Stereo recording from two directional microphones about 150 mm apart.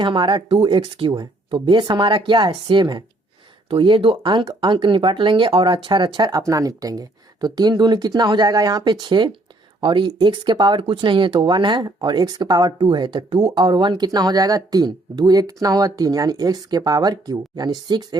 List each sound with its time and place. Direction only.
0.0 s speech: 30° right (ahead or behind)